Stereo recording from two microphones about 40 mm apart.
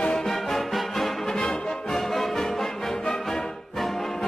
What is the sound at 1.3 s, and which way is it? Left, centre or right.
Music, left.